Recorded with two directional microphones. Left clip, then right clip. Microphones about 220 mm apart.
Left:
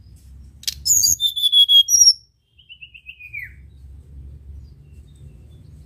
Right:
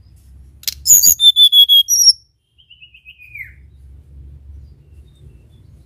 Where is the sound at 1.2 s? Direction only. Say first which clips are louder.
Right 8 dB; 20° right (ahead or behind).